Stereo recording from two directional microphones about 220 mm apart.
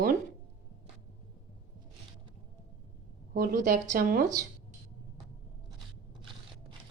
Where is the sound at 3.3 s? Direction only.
40° right (ahead or behind).